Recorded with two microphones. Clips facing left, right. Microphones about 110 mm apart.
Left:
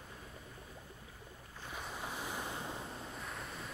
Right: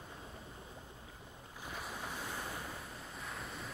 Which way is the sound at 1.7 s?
Centre (ahead or behind).